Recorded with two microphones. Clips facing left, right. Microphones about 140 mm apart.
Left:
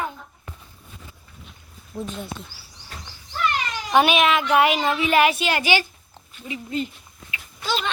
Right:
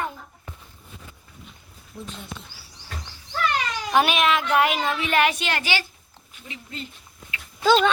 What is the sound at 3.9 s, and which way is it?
Speech, centre (ahead or behind).